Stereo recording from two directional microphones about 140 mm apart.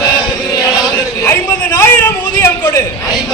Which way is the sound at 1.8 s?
15° left (ahead or behind).